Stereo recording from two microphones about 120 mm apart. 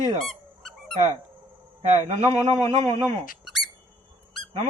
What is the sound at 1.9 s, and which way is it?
Speech, 65° right (ahead or behind).